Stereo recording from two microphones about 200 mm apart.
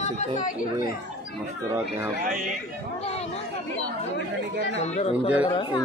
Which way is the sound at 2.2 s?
45° right (ahead or behind).